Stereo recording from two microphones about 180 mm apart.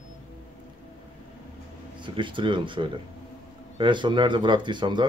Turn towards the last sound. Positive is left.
turn(degrees=-25)  # may be behind; listen again after turning